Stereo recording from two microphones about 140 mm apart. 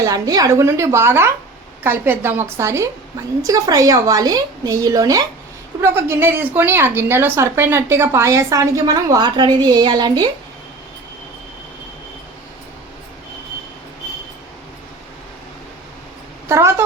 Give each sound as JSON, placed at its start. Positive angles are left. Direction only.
{"t": 0.0, "sound": "a woman's voice", "side_deg": -25}
{"t": 16.5, "sound": "a woman's voice", "side_deg": -20}